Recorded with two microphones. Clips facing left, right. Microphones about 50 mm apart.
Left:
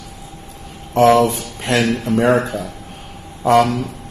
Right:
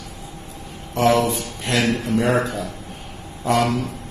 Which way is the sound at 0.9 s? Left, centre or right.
Left.